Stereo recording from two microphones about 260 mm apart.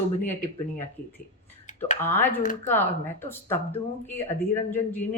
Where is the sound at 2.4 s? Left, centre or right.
Left.